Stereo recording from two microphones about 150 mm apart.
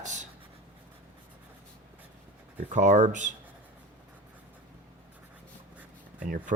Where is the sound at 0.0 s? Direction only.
55° right (ahead or behind).